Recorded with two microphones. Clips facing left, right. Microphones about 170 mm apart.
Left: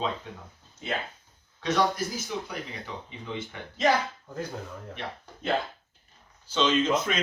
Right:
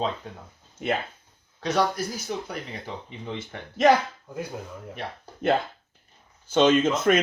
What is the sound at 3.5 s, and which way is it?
Speech, 40° right (ahead or behind).